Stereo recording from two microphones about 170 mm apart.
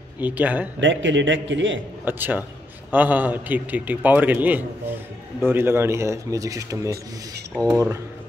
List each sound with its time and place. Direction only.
0.2 s a man's voice: 10° right (ahead or behind)
0.7 s a man's voice: 90° right
2.0 s a man's voice: 10° right (ahead or behind)